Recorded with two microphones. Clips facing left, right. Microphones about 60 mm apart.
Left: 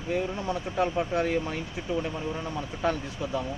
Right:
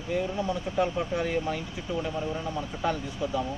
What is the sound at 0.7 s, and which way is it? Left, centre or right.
Speech, left.